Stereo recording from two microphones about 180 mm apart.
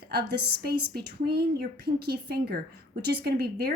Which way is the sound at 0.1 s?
60° right (ahead or behind).